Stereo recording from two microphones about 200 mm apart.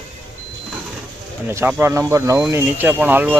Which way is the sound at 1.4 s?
10° right (ahead or behind).